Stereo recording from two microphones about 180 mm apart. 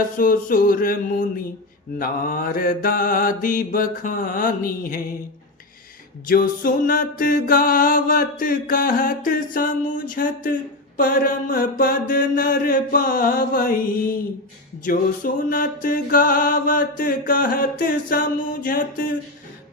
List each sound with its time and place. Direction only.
0.2 s music: 50° left (ahead or behind)
6.2 s music: 55° left (ahead or behind)